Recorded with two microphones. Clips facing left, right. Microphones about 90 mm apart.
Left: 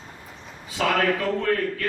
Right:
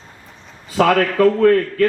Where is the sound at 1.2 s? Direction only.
50° right (ahead or behind).